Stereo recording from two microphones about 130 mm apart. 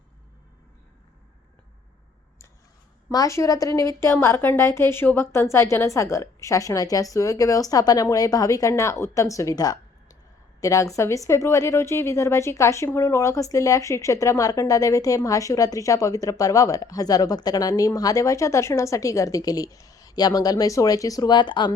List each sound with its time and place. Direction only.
3.1 s a woman's voice: 25° left (ahead or behind)